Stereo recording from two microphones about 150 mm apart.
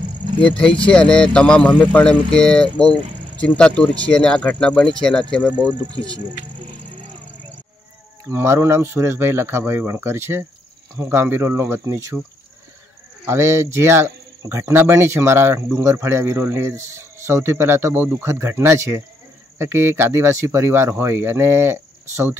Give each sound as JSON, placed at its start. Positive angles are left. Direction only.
{"t": 0.4, "sound": "speech", "side_deg": 10}
{"t": 8.3, "sound": "speech", "side_deg": -20}
{"t": 13.2, "sound": "speech", "side_deg": -15}